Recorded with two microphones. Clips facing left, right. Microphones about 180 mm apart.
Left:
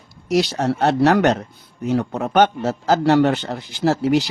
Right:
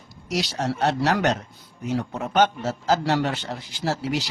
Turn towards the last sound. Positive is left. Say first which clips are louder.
# left 9 dB
turn(degrees=55)  # may be behind; listen again after turning